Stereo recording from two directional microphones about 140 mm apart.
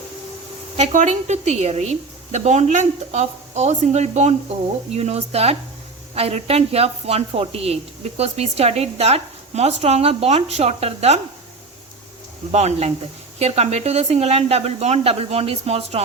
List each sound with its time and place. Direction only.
0.8 s a woman's voice: 55° right (ahead or behind)
12.5 s a woman's voice: 50° right (ahead or behind)